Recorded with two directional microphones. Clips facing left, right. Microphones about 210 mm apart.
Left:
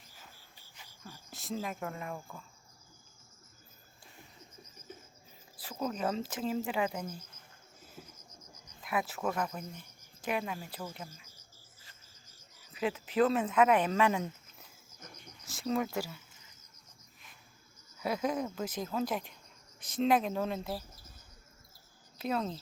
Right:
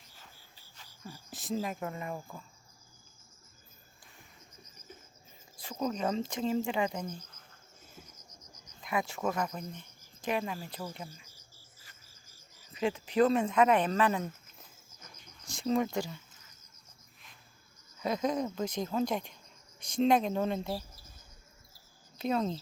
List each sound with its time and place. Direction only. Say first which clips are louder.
1.0 s speech: right 3 dB; centre (ahead or behind)
5.5 s speech: right 2 dB; 5° left (ahead or behind)
8.8 s cricket: right 1 dB; 5° left (ahead or behind)
12.7 s speech: right 2 dB; 5° left (ahead or behind)
15.4 s speech: right 3 dB; centre (ahead or behind)
18.0 s speech: right 2 dB; 5° left (ahead or behind)
22.2 s speech: right 3 dB; centre (ahead or behind)